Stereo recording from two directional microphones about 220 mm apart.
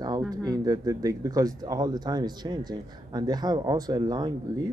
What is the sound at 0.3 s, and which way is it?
Speech, 15° right (ahead or behind).